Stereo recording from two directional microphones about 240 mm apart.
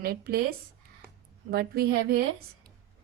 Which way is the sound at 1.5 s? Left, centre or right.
Right.